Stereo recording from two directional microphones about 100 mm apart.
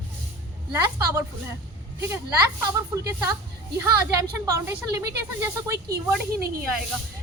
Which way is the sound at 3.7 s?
35° right (ahead or behind).